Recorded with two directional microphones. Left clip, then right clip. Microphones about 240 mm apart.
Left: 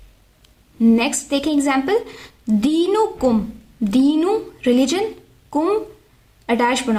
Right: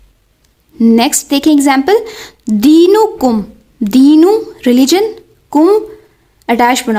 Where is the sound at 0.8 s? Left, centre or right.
Right.